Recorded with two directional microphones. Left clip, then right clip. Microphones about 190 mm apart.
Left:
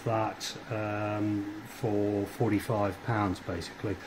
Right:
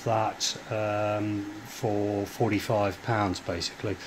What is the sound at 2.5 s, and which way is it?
Speech, 20° right (ahead or behind).